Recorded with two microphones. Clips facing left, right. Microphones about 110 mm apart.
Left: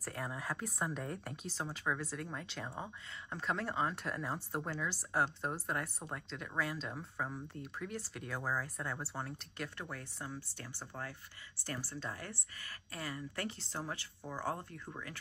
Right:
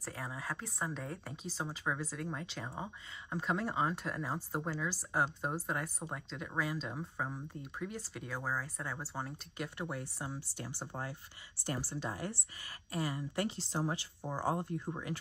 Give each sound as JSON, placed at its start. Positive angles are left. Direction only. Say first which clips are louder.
{"t": 0.0, "sound": "speech", "louder": "left 1 dB", "side_deg": 0}
{"t": 10.8, "sound": "speech", "louder": "right 1 dB", "side_deg": -30}